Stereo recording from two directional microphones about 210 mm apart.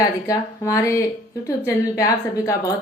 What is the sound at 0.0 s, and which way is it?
A woman's voice, 15° left (ahead or behind).